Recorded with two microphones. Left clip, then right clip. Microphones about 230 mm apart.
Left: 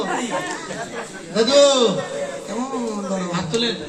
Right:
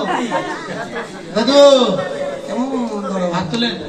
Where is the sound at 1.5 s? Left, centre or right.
Right.